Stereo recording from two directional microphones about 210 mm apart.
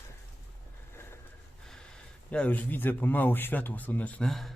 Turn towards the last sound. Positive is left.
turn(degrees=0)  # may be behind; listen again after turning